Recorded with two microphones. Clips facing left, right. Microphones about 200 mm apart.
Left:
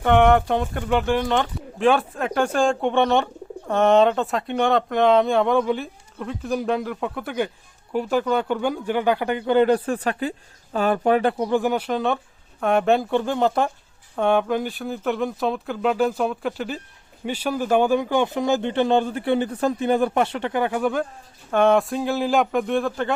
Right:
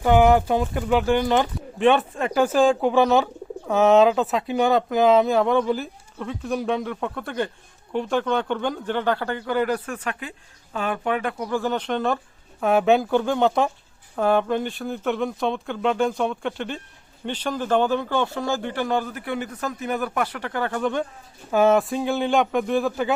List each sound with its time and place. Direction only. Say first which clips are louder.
0.0 s speech: even; 5° right (ahead or behind)
21.5 s speech: even; 5° right (ahead or behind)